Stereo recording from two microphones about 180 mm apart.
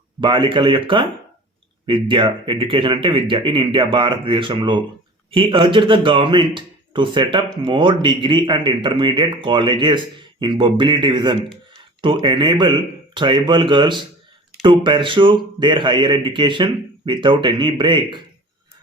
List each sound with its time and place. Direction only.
0.2 s speech: 25° right (ahead or behind)